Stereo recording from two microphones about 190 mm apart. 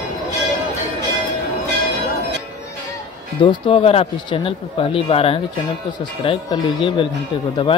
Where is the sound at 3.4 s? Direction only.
30° left (ahead or behind).